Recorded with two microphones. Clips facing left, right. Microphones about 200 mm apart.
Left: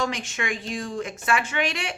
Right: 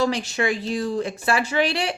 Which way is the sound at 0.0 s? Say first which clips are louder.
Right 6 dB; 35° right (ahead or behind).